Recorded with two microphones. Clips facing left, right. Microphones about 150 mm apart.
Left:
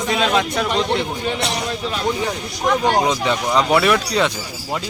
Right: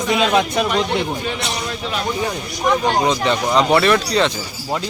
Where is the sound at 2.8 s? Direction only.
5° left (ahead or behind).